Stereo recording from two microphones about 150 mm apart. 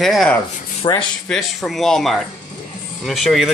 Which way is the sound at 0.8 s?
30° left (ahead or behind).